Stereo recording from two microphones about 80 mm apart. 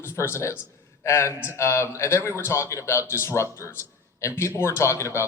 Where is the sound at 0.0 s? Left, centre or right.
Left.